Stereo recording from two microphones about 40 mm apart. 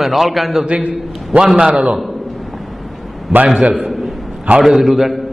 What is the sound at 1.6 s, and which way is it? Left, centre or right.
Speech, centre.